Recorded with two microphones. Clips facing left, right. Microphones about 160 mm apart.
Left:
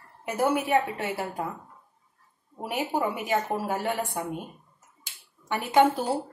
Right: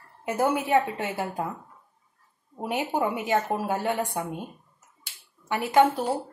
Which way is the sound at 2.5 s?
20° right (ahead or behind).